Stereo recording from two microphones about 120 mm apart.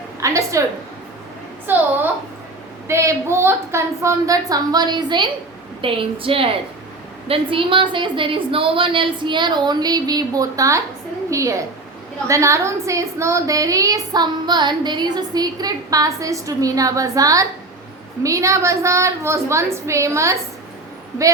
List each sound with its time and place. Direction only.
0.2 s a woman's voice: 25° right (ahead or behind)
1.7 s a child's voice: 15° right (ahead or behind)